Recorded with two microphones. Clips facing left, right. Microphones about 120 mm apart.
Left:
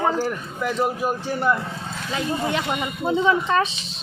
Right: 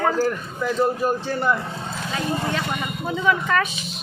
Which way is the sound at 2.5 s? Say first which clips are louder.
Left 1 dB; 20° left (ahead or behind).